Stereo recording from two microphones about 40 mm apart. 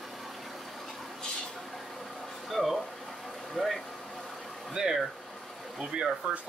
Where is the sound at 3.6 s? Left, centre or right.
Centre.